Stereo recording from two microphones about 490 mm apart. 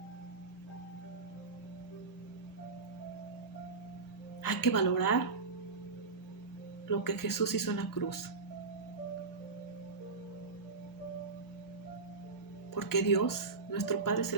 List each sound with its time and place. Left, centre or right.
4.4 s a woman's voice: left
6.9 s speech: left
12.7 s speech: left